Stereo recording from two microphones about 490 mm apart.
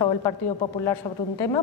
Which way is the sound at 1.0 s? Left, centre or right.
Centre.